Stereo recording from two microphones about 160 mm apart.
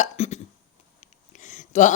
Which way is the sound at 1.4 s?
50° left (ahead or behind).